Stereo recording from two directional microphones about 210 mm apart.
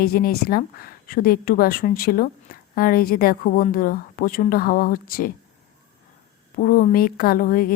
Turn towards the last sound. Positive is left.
turn(degrees=40)  # may be behind; listen again after turning